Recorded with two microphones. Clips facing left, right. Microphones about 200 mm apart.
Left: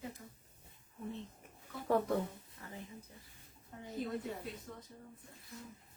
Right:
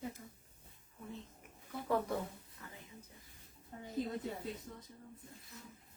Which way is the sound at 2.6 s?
35° left (ahead or behind).